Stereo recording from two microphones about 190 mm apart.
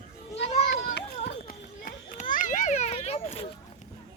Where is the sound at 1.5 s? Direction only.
45° left (ahead or behind).